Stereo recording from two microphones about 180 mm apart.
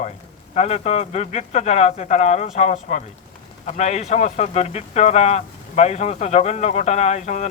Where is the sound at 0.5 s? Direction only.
40° left (ahead or behind).